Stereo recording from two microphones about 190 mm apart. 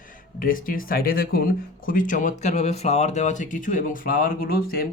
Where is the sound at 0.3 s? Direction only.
45° left (ahead or behind).